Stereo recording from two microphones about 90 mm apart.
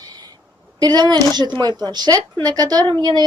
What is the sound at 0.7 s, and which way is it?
Speech, 50° right (ahead or behind).